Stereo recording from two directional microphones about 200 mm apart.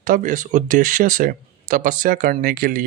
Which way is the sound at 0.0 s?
40° right (ahead or behind).